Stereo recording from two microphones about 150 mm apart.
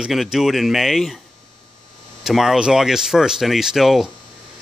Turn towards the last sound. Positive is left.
turn(degrees=0)  # may be behind; listen again after turning